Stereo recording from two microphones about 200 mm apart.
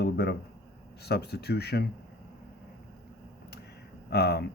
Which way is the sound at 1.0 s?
55° left (ahead or behind).